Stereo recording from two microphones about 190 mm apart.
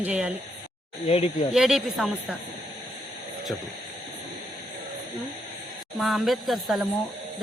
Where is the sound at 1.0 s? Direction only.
30° left (ahead or behind).